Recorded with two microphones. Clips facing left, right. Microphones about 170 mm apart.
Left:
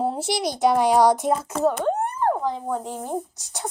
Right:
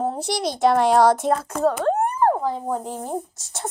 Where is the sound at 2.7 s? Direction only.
Centre (ahead or behind).